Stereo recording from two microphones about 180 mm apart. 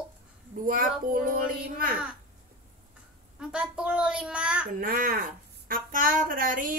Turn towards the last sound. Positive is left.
turn(degrees=-50)  # may be behind; listen again after turning